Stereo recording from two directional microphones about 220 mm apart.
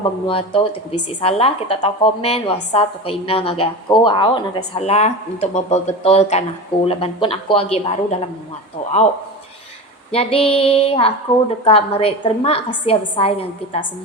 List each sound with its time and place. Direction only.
0.3 s a woman's voice: 25° left (ahead or behind)
10.1 s a woman's voice: 25° left (ahead or behind)